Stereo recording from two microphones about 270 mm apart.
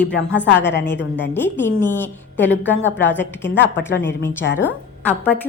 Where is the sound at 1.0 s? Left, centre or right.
Left.